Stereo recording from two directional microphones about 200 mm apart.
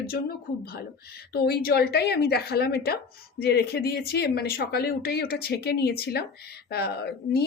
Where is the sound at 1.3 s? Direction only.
50° left (ahead or behind).